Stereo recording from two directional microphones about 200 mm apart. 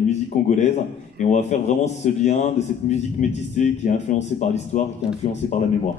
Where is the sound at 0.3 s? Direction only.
35° left (ahead or behind).